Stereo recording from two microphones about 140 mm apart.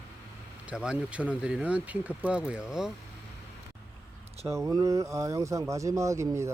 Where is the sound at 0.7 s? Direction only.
5° right (ahead or behind).